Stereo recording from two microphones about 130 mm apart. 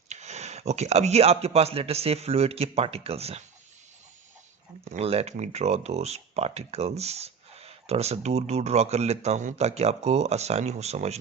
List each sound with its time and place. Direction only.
0.1 s speech: 60° right (ahead or behind)
4.9 s speech: 50° right (ahead or behind)